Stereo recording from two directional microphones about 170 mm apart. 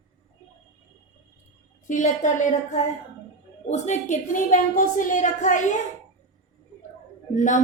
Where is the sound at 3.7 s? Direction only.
45° left (ahead or behind).